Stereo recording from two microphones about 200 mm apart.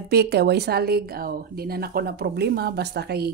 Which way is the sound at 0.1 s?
55° right (ahead or behind).